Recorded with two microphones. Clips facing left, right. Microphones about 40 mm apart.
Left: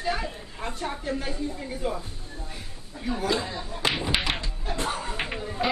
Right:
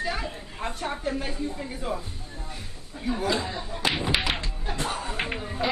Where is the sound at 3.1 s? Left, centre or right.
Centre.